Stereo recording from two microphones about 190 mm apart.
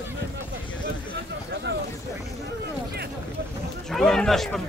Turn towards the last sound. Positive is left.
turn(degrees=0)  # may be behind; listen again after turning